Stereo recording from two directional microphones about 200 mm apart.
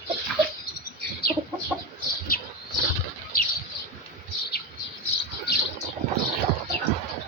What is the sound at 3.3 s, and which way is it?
Bird, 45° left (ahead or behind).